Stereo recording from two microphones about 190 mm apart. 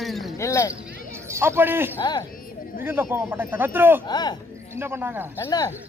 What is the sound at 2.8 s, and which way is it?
Speech, 10° right (ahead or behind).